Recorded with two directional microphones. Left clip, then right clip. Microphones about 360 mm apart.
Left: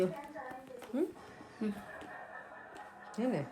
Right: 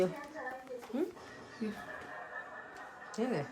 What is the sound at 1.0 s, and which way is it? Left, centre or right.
Speech, centre.